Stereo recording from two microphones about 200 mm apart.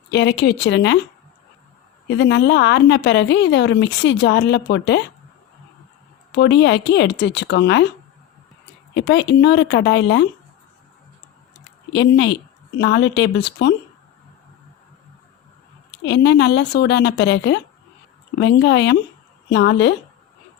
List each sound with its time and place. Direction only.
0.1 s a woman's voice: 60° left (ahead or behind)
2.0 s a woman's voice: 60° left (ahead or behind)
6.3 s a woman's voice: 60° left (ahead or behind)
9.0 s a woman's voice: 60° left (ahead or behind)
11.9 s a woman's voice: 60° left (ahead or behind)
16.0 s a woman's voice: 60° left (ahead or behind)